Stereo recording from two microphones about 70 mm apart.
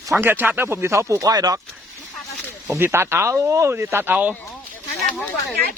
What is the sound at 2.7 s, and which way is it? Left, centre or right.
Speech, right.